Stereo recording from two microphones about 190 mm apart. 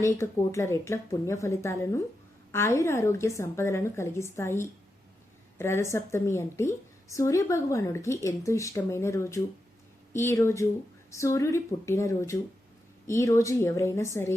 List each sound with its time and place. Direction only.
0.0 s a woman's voice: 15° left (ahead or behind)